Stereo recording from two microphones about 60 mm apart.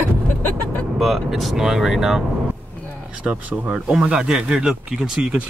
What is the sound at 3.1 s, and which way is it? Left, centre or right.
Speech, centre.